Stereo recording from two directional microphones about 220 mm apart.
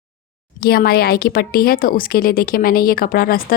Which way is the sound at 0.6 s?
45° left (ahead or behind).